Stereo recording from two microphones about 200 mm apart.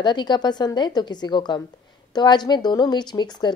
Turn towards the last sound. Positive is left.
turn(degrees=20)  # may be behind; listen again after turning